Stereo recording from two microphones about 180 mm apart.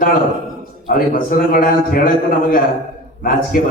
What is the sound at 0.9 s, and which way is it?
A man's voice, 50° left (ahead or behind).